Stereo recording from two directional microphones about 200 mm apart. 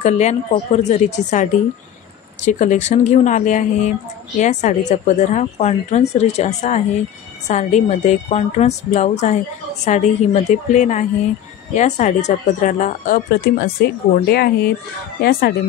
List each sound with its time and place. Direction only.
0.0 s speech: 35° left (ahead or behind); by 14.5 s 50° left (ahead or behind)